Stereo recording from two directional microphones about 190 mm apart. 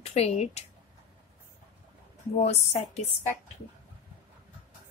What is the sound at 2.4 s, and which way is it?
Speech, 35° left (ahead or behind).